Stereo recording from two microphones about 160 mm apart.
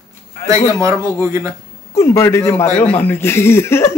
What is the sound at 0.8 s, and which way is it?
Speech, 20° right (ahead or behind).